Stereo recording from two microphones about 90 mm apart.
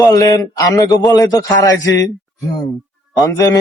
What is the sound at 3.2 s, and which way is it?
Speech, 40° left (ahead or behind).